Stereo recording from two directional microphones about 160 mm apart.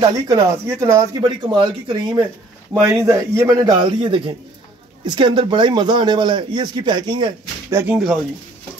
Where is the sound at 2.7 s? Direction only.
15° right (ahead or behind); by 7.3 s 30° right (ahead or behind).